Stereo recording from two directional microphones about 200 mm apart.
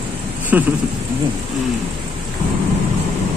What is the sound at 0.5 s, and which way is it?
Speech, 10° right (ahead or behind).